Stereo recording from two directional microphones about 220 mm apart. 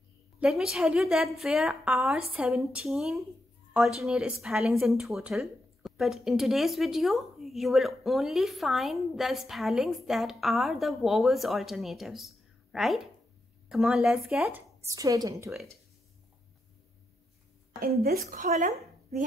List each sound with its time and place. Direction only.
0.4 s a woman's voice: centre (ahead or behind)
14.9 s a woman's voice: 15° right (ahead or behind)
17.7 s speech: 45° right (ahead or behind)